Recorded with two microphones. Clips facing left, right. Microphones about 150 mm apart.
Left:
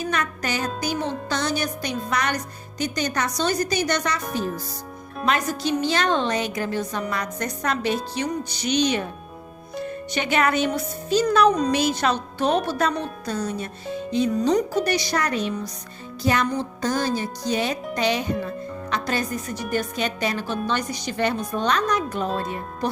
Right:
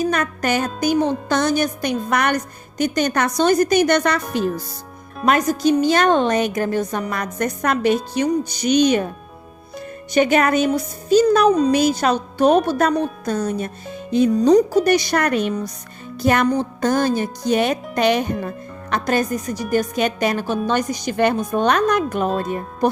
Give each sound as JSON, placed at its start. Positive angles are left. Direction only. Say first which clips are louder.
{"t": 0.0, "sound": "a woman's voice", "louder": "right 6 dB", "side_deg": -45}
{"t": 5.2, "sound": "a woman's voice", "louder": "right 7 dB", "side_deg": -45}
{"t": 10.2, "sound": "a woman's voice", "louder": "right 6 dB", "side_deg": -45}
{"t": 11.4, "sound": "speech", "louder": "right 4 dB", "side_deg": -5}
{"t": 11.9, "sound": "a woman's voice", "louder": "right 5 dB", "side_deg": -45}
{"t": 14.3, "sound": "a woman's voice", "louder": "right 9 dB", "side_deg": -40}
{"t": 16.2, "sound": "music", "louder": "right 5 dB", "side_deg": -55}
{"t": 16.6, "sound": "a woman's voice", "louder": "right 6 dB", "side_deg": -55}